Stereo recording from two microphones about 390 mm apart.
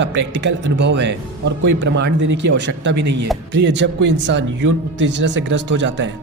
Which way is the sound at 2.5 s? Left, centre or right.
Right.